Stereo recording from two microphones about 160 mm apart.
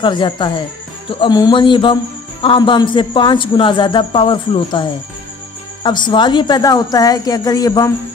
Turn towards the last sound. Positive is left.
turn(degrees=25)  # may be behind; listen again after turning